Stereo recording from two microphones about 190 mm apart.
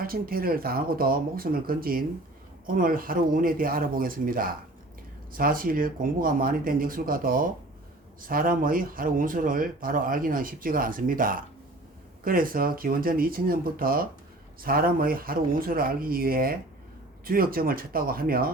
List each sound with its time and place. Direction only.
0.0 s speech: 50° right (ahead or behind)